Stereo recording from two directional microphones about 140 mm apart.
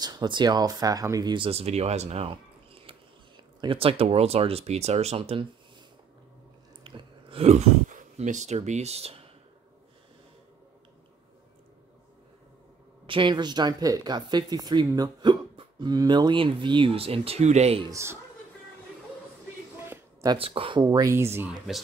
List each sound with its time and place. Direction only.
0.0 s speech: 30° right (ahead or behind)
6.8 s a sound: 35° right (ahead or behind)
13.0 s speech: 35° right (ahead or behind)
17.8 s speech: 20° right (ahead or behind)
20.3 s speech: 40° right (ahead or behind)
20.8 s speech: 25° right (ahead or behind)
21.5 s speech: centre (ahead or behind)